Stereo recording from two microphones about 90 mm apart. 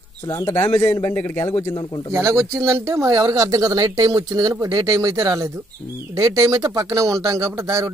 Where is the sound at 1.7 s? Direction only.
50° left (ahead or behind).